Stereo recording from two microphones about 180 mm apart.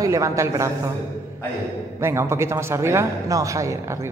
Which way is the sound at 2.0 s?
15° right (ahead or behind).